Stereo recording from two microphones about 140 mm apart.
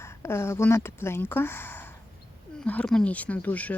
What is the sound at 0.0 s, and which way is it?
Speech, 20° left (ahead or behind).